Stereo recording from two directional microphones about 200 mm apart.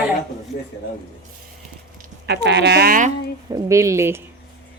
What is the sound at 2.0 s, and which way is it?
Speech, 55° right (ahead or behind).